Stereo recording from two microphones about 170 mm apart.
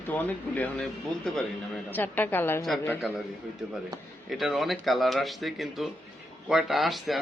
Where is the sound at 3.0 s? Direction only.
Centre (ahead or behind).